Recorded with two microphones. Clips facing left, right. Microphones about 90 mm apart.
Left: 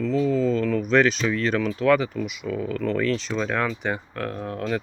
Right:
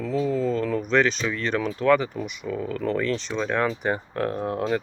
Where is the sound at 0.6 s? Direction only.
30° right (ahead or behind).